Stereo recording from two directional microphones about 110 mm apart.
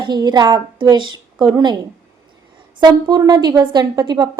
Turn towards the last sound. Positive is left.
turn(degrees=-40)  # may be behind; listen again after turning